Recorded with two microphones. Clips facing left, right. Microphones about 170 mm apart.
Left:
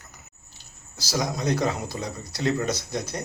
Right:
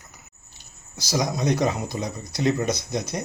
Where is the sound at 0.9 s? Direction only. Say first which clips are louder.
Right 3 dB; 15° right (ahead or behind).